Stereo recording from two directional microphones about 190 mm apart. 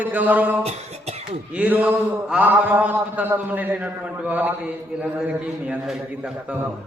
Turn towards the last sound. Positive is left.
turn(degrees=-5)  # may be behind; listen again after turning